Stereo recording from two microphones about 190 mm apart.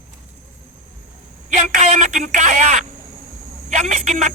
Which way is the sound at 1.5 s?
40° right (ahead or behind).